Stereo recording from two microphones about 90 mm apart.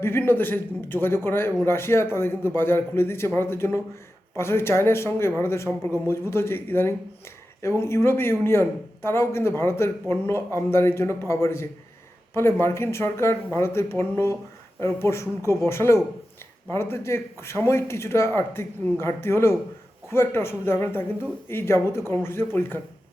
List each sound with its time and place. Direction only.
0.0 s a man's voice: 25° left (ahead or behind)